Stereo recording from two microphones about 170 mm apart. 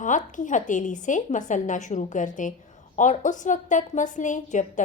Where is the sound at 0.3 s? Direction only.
50° left (ahead or behind).